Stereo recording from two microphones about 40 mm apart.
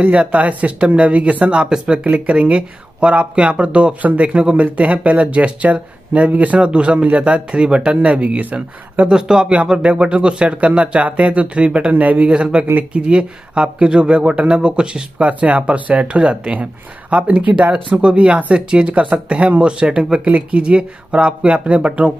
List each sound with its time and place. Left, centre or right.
0.0 s speech: right
2.0 s speech: right
9.0 s speech: centre
9.8 s speech: right
21.5 s speech: right